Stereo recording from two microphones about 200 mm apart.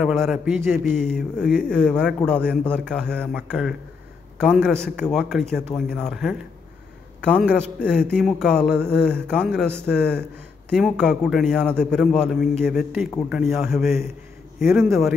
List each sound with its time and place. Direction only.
0.0 s a man's voice: centre (ahead or behind)
7.8 s a man's voice: 5° left (ahead or behind)